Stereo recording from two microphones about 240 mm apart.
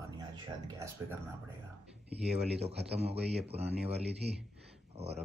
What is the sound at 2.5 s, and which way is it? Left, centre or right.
A man's voice, right.